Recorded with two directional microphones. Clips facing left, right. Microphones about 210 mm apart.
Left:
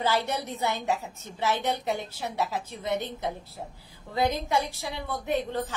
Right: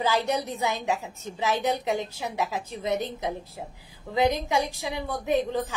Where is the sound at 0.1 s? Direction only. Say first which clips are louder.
Right 2 dB; 15° right (ahead or behind).